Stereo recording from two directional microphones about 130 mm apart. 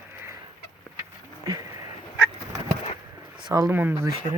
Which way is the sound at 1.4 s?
25° right (ahead or behind).